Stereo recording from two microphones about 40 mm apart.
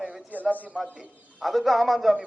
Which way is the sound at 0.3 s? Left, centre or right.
Right.